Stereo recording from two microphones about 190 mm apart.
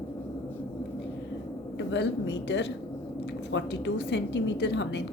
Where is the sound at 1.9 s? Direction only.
65° left (ahead or behind).